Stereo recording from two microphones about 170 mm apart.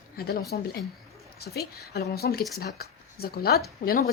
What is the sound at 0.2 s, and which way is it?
A woman's voice, 65° left (ahead or behind).